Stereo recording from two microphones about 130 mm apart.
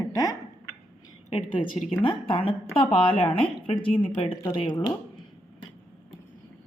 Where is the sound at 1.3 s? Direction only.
40° left (ahead or behind).